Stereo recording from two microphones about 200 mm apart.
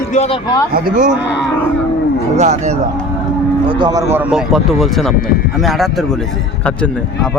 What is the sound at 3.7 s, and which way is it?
Speech, 20° right (ahead or behind).